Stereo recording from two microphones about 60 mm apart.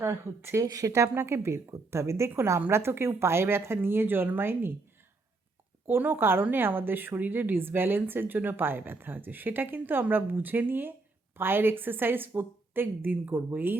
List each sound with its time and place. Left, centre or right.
0.0 s a woman's voice: right
0.7 s speech: right
1.0 s a woman's voice: right
2.3 s speech: right
5.9 s speech: right